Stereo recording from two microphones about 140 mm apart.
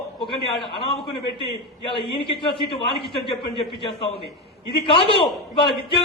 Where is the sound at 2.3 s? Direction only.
35° left (ahead or behind).